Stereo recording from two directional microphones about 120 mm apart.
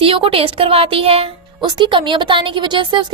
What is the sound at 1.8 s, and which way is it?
A child's voice, 40° right (ahead or behind).